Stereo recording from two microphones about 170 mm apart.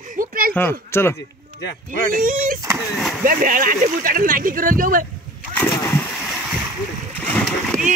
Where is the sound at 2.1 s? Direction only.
50° right (ahead or behind).